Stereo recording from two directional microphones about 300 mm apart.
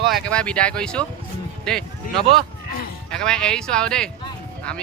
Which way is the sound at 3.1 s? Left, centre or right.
Centre.